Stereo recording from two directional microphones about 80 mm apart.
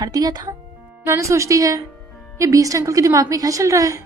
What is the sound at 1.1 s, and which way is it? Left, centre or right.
A woman's voice, right.